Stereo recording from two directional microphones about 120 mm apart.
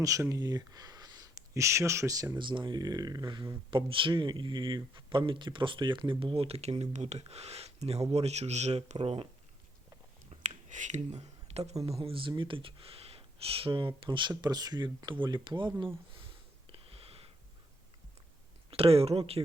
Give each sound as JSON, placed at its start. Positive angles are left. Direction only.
{"t": 0.0, "sound": "speech", "side_deg": -25}
{"t": 2.4, "sound": "speech", "side_deg": -40}
{"t": 9.0, "sound": "speech", "side_deg": -50}
{"t": 10.2, "sound": "a sound", "side_deg": -80}
{"t": 11.9, "sound": "speech", "side_deg": -55}
{"t": 16.6, "sound": "a sound", "side_deg": -50}
{"t": 18.7, "sound": "speech", "side_deg": -55}